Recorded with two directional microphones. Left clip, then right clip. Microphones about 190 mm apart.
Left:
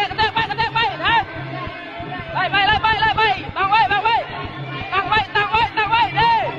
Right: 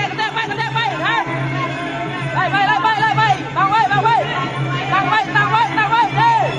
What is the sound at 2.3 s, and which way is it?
Music, 25° left (ahead or behind).